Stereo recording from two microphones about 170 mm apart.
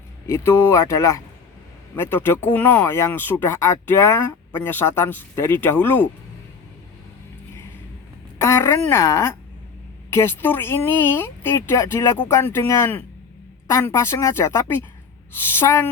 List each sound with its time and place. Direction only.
0.3 s speech: 15° left (ahead or behind)
8.4 s speech: 15° left (ahead or behind)